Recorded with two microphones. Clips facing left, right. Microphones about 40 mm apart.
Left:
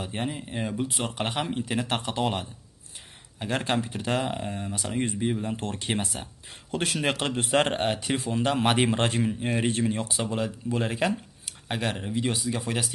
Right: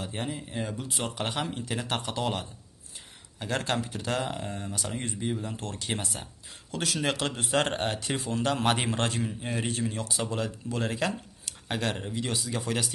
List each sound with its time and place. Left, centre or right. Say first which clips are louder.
0.0 s speech: left 3 dB; left
7.6 s speech: left 3 dB; left
10.2 s speech: left 2 dB; centre